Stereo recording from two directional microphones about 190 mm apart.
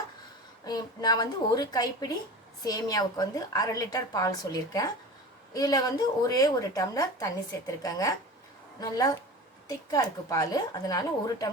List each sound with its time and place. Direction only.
0.6 s a woman's voice: 20° left (ahead or behind)